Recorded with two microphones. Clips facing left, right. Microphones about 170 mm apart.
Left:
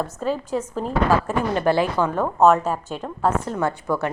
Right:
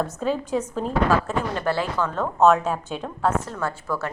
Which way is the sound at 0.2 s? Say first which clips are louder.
Even; 5° left (ahead or behind).